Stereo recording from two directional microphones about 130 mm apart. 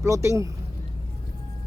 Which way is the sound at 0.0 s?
20° right (ahead or behind).